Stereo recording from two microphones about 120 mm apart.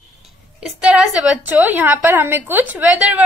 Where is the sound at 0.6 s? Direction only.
5° right (ahead or behind).